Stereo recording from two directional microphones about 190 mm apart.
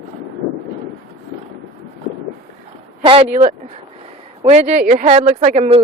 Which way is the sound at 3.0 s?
25° right (ahead or behind).